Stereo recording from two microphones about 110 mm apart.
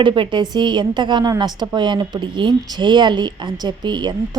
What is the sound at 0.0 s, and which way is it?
A woman's voice, 45° right (ahead or behind).